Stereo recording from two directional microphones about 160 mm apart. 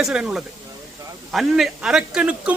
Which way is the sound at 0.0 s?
5° right (ahead or behind).